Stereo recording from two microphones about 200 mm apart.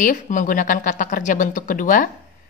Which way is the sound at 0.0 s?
40° left (ahead or behind).